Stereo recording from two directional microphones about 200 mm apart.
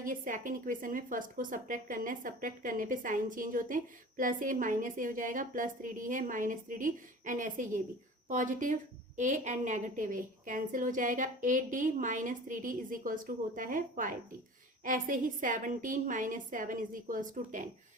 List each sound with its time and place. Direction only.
0.0 s a woman's voice: 40° right (ahead or behind)